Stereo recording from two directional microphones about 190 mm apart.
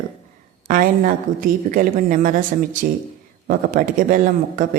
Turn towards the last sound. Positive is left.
turn(degrees=-45)  # may be behind; listen again after turning